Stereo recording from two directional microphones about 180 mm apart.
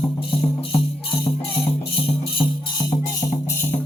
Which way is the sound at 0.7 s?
30° left (ahead or behind).